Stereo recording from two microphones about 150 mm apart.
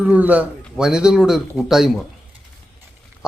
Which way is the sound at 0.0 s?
10° right (ahead or behind).